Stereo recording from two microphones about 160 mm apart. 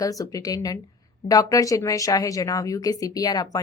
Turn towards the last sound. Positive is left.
turn(degrees=25)  # may be behind; listen again after turning